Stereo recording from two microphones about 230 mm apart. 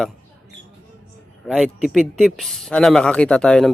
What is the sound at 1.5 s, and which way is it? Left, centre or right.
Speech, centre.